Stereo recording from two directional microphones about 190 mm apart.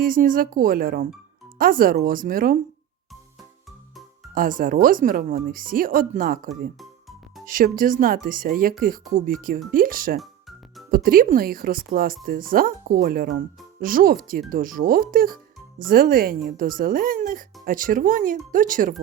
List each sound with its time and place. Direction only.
0.0 s speech: 45° right (ahead or behind)
4.4 s speech: 45° right (ahead or behind)